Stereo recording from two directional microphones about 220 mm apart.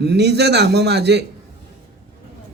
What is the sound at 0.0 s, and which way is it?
A man's voice, 50° right (ahead or behind).